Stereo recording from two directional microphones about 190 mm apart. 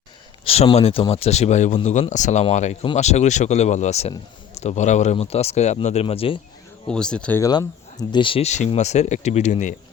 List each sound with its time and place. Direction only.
0.4 s speech: 35° left (ahead or behind)
6.8 s speech: 5° left (ahead or behind); by 9.7 s 40° left (ahead or behind)